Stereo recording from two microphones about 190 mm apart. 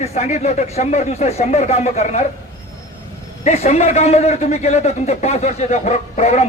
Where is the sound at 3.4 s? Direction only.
35° left (ahead or behind).